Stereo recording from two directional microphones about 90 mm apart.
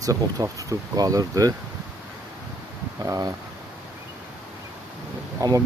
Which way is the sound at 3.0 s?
45° right (ahead or behind).